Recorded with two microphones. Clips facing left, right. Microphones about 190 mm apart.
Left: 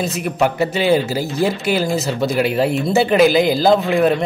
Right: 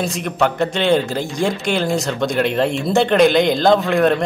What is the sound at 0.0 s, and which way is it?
Speech, 5° left (ahead or behind).